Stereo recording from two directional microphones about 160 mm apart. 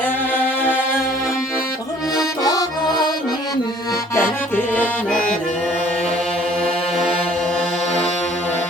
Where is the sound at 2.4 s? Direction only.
25° left (ahead or behind).